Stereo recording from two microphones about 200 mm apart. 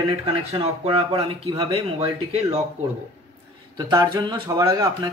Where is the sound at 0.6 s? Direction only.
30° right (ahead or behind).